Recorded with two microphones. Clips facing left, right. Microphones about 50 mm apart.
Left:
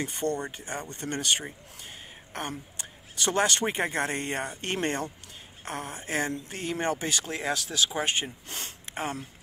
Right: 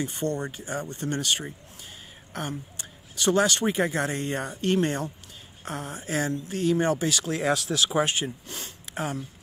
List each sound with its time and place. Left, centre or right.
0.0 s speech: left
2.8 s speech: left
7.4 s speech: centre
8.0 s speech: left
8.5 s a sound: left
8.9 s speech: left